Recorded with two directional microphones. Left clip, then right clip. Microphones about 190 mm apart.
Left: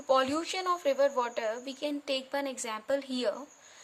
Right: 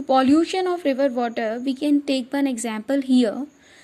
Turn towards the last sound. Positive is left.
turn(degrees=-20)  # may be behind; listen again after turning